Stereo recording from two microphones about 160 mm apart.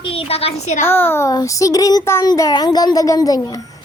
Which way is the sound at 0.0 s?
35° left (ahead or behind).